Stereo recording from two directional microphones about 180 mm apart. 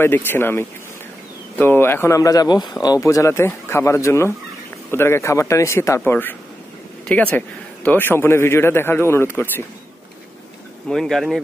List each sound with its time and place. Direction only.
0.0 s speech: 10° left (ahead or behind)
10.9 s speech: centre (ahead or behind)